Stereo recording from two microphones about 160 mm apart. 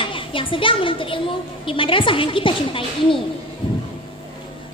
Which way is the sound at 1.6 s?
35° left (ahead or behind).